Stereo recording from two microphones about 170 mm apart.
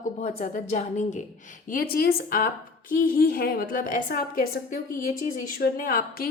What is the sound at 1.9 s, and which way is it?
A woman's voice, 60° left (ahead or behind).